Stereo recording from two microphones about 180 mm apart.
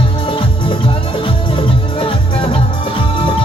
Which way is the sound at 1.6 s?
30° left (ahead or behind).